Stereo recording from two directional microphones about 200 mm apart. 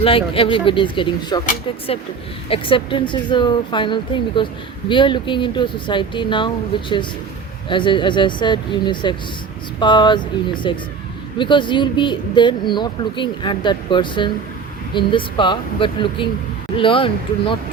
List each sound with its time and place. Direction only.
0.0 s speech: 25° left (ahead or behind)
2.5 s speech: 25° left (ahead or behind)